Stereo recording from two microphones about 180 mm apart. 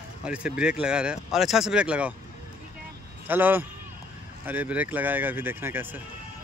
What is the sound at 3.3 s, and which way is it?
Speech, 10° right (ahead or behind).